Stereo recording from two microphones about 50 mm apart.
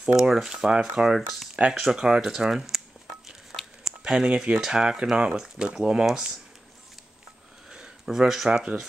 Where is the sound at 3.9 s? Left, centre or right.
Centre.